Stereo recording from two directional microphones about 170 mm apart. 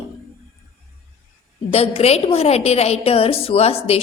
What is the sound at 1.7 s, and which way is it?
A woman's voice, 35° left (ahead or behind).